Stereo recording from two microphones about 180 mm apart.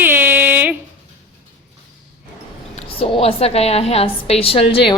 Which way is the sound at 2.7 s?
30° left (ahead or behind).